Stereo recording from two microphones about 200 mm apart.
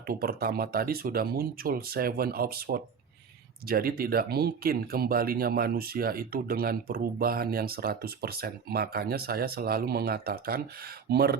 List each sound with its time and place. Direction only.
0.1 s speech: 45° right (ahead or behind)